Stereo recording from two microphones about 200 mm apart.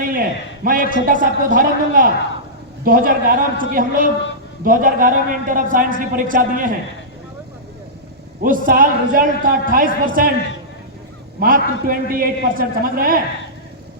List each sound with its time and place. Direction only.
0.1 s a man's voice: 45° right (ahead or behind)
8.4 s a man's voice: 45° right (ahead or behind)
11.3 s a man's voice: 45° right (ahead or behind)